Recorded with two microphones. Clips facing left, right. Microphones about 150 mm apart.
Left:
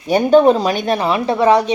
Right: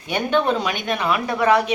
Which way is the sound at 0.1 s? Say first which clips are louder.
Left 9 dB; 40° left (ahead or behind).